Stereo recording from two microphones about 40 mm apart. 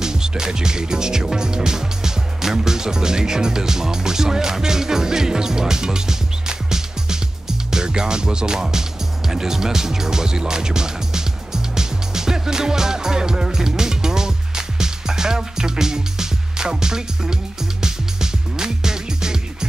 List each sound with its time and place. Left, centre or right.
0.0 s speech: centre
9.3 s music: centre